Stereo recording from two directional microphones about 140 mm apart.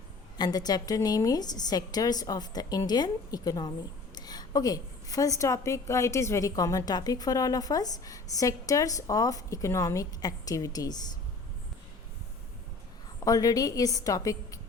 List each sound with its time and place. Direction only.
0.3 s a woman's voice: 30° left (ahead or behind)
13.1 s a woman's voice: 25° left (ahead or behind)